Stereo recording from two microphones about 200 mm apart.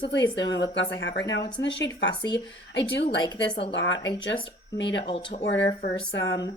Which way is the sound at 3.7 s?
65° left (ahead or behind).